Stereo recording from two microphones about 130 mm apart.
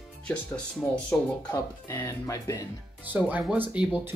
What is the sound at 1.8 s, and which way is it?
Speech, 20° left (ahead or behind).